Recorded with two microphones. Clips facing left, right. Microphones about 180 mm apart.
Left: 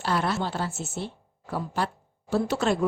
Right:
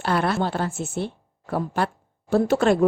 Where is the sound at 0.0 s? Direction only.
60° right (ahead or behind).